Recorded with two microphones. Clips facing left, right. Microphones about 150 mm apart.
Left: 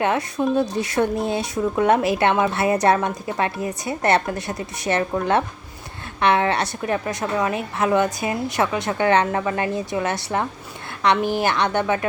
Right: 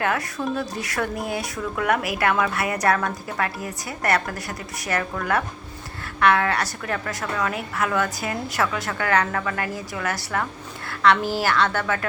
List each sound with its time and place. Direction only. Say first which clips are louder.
0.0 s speech: left 4 dB; 20° left (ahead or behind)